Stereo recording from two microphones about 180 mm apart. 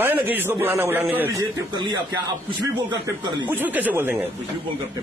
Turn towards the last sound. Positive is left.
turn(degrees=-10)  # may be behind; listen again after turning